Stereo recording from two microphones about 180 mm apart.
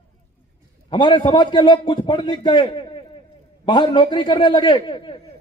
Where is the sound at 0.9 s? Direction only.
25° left (ahead or behind).